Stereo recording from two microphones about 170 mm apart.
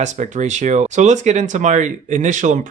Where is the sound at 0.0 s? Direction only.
45° right (ahead or behind).